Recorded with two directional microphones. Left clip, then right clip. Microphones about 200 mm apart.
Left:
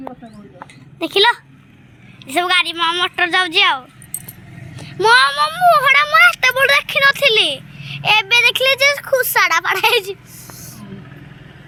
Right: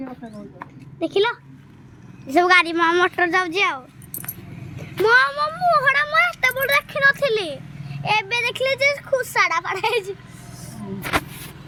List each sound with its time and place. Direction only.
0.9 s speech: 5° left (ahead or behind)
2.2 s a woman's voice: 25° right (ahead or behind); by 3.1 s 40° right (ahead or behind)
3.2 s speech: 5° right (ahead or behind)